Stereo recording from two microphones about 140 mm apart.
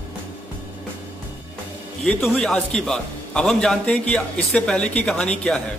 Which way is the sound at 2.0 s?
5° left (ahead or behind).